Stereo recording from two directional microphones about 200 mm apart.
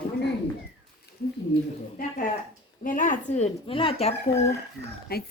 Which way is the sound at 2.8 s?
40° left (ahead or behind).